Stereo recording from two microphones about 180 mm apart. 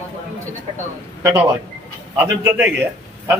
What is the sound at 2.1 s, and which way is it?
A man's voice, 10° right (ahead or behind).